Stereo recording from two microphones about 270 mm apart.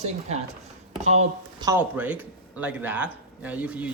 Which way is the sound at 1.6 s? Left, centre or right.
Centre.